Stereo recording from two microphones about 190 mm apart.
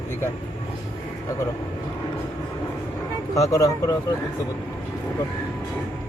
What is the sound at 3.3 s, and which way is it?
Speech, 15° left (ahead or behind).